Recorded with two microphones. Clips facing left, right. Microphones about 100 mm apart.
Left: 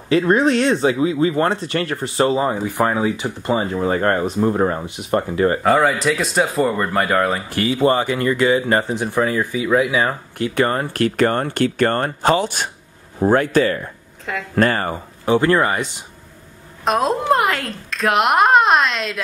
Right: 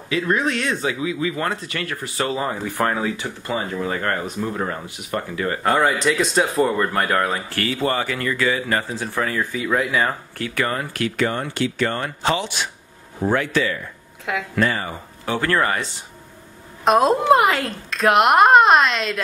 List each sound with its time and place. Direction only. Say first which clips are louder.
0.1 s speech: left 6 dB; 30° left (ahead or behind)
5.6 s speech: left 3 dB; centre (ahead or behind)
7.5 s speech: left 8 dB; 20° left (ahead or behind)
10.4 s speech: left 5 dB; 25° left (ahead or behind)
10.9 s speech: left 5 dB; 45° left (ahead or behind)
15.2 s speech: left 5 dB; 20° left (ahead or behind)
16.8 s speech: right 2 dB; centre (ahead or behind)